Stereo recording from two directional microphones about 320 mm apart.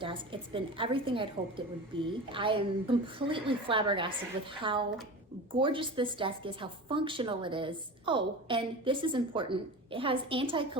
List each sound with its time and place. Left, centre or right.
0.0 s a woman's voice: centre